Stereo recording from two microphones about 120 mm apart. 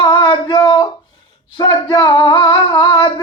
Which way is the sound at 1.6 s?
40° left (ahead or behind).